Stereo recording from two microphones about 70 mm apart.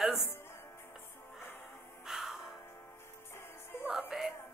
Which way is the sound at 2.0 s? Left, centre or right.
Centre.